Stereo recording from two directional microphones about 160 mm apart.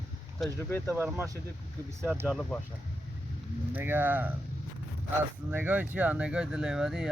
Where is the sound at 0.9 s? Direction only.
15° right (ahead or behind).